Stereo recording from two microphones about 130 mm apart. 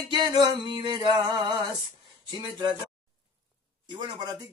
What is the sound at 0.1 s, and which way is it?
Music, 35° right (ahead or behind).